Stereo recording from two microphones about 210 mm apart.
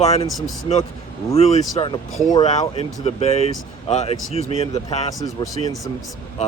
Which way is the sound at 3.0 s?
30° left (ahead or behind).